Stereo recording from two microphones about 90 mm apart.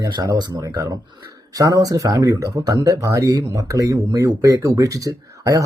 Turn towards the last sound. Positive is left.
turn(degrees=-40)  # may be behind; listen again after turning